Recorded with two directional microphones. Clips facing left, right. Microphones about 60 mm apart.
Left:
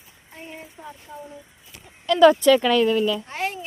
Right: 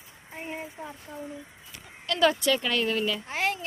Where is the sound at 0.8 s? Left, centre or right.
Centre.